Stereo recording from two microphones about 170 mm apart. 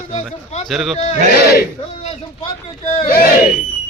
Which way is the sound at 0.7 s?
5° right (ahead or behind).